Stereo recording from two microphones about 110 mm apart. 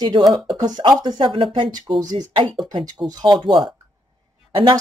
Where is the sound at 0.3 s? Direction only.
35° right (ahead or behind).